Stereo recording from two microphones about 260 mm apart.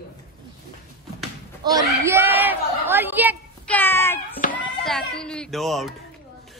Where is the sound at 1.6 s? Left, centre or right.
Centre.